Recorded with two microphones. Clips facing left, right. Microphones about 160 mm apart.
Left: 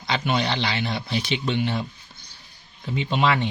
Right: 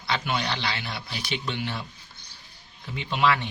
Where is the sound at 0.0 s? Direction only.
20° left (ahead or behind).